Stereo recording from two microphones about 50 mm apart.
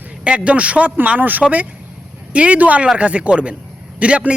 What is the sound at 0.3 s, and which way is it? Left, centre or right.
Speech, right.